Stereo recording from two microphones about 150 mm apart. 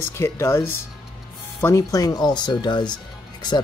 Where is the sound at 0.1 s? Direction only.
15° left (ahead or behind).